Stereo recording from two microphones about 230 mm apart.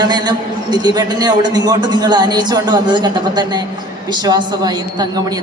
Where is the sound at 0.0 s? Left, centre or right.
Centre.